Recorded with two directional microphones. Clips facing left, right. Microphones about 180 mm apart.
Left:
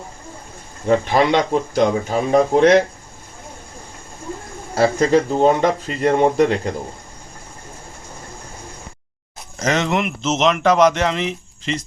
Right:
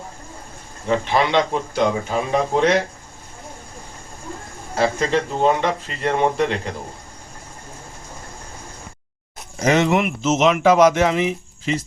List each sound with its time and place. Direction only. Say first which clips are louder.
0.9 s speech: left 4 dB; 40° left (ahead or behind)
4.7 s speech: left 4 dB; 40° left (ahead or behind)
9.6 s speech: right 2 dB; 10° right (ahead or behind)